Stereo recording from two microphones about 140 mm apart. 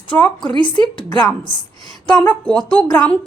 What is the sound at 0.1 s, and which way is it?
Speech, 10° left (ahead or behind).